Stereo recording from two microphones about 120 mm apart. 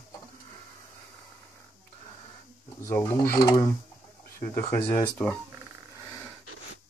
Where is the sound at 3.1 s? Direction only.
30° left (ahead or behind).